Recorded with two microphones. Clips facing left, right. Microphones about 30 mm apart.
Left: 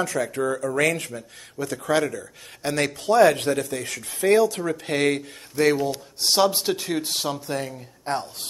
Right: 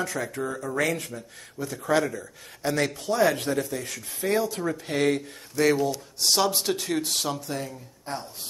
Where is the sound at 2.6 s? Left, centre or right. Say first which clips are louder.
Left 3 dB; left.